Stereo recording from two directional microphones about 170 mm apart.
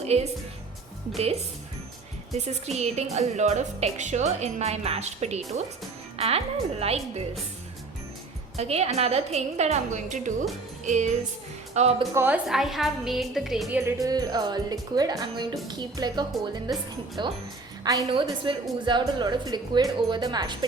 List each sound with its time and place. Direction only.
0.0 s a woman's voice: 40° right (ahead or behind)
8.5 s a woman's voice: 40° right (ahead or behind)
10.8 s music: 45° right (ahead or behind)
11.7 s a woman's voice: 40° right (ahead or behind)
12.1 s a woman's voice: 15° right (ahead or behind)
12.5 s a woman's voice: centre (ahead or behind)
13.8 s speech: 20° right (ahead or behind)